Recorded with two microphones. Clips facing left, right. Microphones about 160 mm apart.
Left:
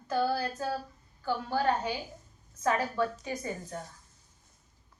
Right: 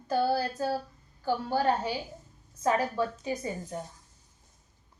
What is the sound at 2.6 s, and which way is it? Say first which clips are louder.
Speech: right 1 dB; 25° right (ahead or behind).